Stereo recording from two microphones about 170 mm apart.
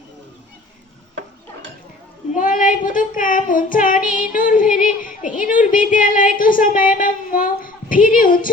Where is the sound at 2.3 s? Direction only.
50° left (ahead or behind).